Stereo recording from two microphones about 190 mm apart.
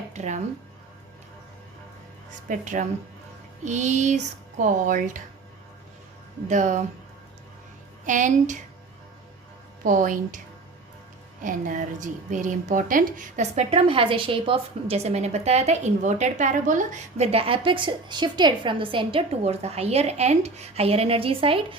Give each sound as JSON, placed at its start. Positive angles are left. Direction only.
{"t": 0.1, "sound": "music", "side_deg": -40}
{"t": 2.5, "sound": "a woman's voice", "side_deg": -45}
{"t": 6.5, "sound": "a woman's voice", "side_deg": -40}
{"t": 8.0, "sound": "a woman's voice", "side_deg": -40}
{"t": 9.8, "sound": "a woman's voice", "side_deg": -45}
{"t": 11.4, "sound": "a woman's voice", "side_deg": -45}